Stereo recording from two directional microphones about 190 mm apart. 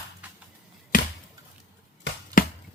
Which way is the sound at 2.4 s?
45° left (ahead or behind).